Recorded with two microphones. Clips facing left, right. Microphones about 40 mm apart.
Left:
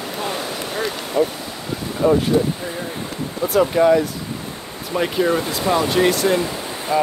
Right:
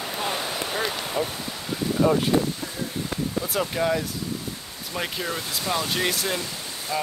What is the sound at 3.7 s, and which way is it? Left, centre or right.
Speech, centre.